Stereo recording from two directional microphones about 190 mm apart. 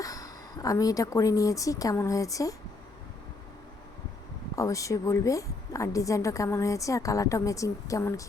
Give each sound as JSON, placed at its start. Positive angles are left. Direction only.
{"t": 0.0, "sound": "speech", "side_deg": 20}
{"t": 4.5, "sound": "a woman's voice", "side_deg": 15}